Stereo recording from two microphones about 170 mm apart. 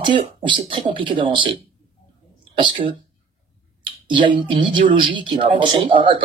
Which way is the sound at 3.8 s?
30° right (ahead or behind).